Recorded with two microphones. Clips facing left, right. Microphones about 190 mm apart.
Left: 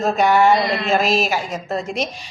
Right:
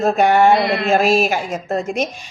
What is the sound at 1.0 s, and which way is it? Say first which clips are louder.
Speech: right 4 dB; 10° right (ahead or behind).